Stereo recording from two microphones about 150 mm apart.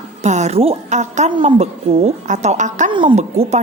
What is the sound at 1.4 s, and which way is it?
Speech, 35° right (ahead or behind).